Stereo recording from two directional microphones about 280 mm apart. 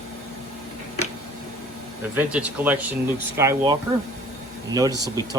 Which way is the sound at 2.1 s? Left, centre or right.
Centre.